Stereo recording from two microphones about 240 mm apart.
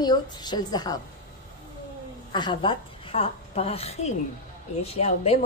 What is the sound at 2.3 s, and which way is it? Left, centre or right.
A woman's voice, centre.